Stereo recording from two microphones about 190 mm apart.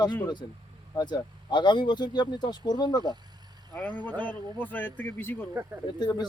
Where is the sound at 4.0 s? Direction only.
10° left (ahead or behind).